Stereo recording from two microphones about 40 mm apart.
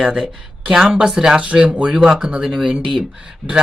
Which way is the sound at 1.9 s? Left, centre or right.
Centre.